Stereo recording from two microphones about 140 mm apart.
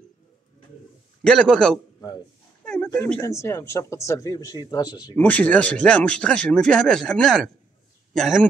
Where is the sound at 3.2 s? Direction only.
20° left (ahead or behind).